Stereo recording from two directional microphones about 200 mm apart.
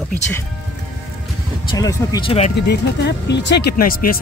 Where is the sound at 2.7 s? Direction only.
60° left (ahead or behind).